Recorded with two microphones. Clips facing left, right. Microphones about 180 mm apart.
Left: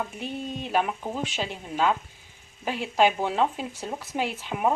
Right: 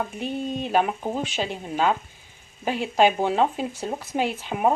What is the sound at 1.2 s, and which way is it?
Frying, centre (ahead or behind).